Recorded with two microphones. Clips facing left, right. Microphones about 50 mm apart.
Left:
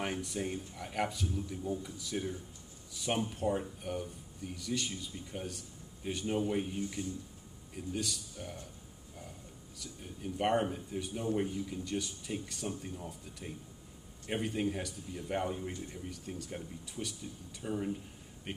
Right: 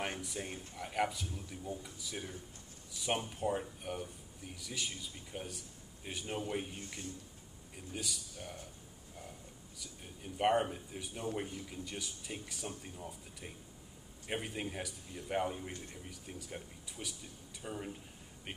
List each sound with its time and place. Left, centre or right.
0.2 s a man's voice: centre
9.8 s a man's voice: centre